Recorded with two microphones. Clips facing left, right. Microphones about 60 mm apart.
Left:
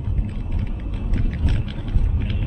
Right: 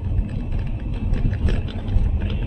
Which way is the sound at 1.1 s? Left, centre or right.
Left.